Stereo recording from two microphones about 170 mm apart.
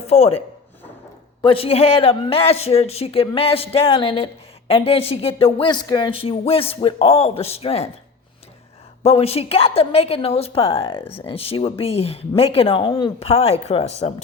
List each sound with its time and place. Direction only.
0.0 s speech: 35° left (ahead or behind)
9.0 s speech: 35° left (ahead or behind)